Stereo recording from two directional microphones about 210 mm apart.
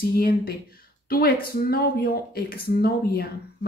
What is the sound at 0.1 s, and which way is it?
Speech, 45° left (ahead or behind).